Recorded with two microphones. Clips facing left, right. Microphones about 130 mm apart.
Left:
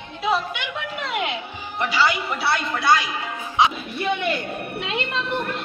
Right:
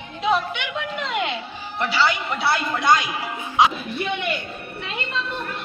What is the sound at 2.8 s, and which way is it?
Speech, 15° right (ahead or behind).